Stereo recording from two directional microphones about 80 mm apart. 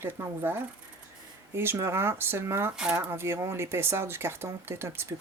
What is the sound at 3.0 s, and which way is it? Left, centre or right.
Speech, right.